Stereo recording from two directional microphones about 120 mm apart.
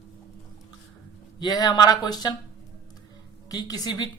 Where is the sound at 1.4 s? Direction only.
35° left (ahead or behind).